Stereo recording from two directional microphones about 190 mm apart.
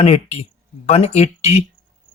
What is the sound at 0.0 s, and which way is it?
Speech, 35° left (ahead or behind).